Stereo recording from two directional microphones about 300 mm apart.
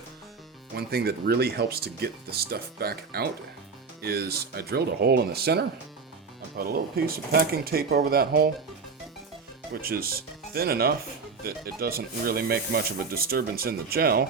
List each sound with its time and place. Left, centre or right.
0.8 s speech: right
9.8 s speech: right